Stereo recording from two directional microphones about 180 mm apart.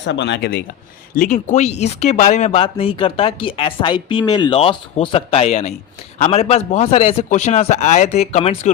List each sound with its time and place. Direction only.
0.0 s speech: 80° left
1.1 s speech: 45° left (ahead or behind)